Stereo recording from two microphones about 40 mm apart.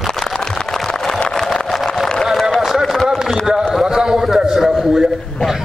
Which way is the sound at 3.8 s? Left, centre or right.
Centre.